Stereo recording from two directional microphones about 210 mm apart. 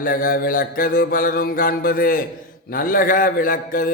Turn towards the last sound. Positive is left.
turn(degrees=40)  # may be behind; listen again after turning